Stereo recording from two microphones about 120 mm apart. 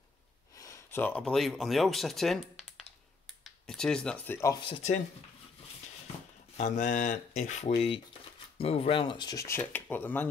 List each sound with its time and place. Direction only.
0.6 s a sound: 25° left (ahead or behind)
1.2 s speech: centre (ahead or behind)
3.4 s a sound: 5° left (ahead or behind)
4.3 s speech: 25° left (ahead or behind)
6.5 s speech: 80° left
8.5 s speech: 55° left (ahead or behind); by 9.7 s 25° left (ahead or behind)
9.7 s speech: 15° left (ahead or behind)